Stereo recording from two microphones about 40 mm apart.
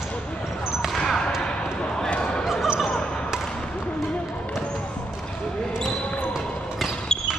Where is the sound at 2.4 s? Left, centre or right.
Centre.